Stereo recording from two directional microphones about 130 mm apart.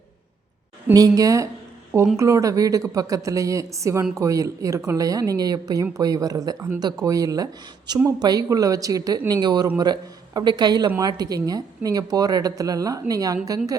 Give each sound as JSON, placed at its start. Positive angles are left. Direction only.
{"t": 0.9, "sound": "speech", "side_deg": -30}